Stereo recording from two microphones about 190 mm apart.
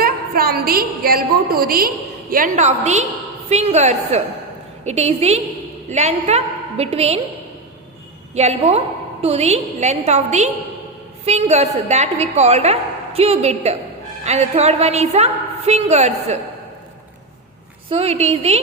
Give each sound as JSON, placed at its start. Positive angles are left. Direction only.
{"t": 0.0, "sound": "a woman's voice", "side_deg": -50}
{"t": 8.4, "sound": "a woman's voice", "side_deg": -35}
{"t": 17.8, "sound": "a woman's voice", "side_deg": -35}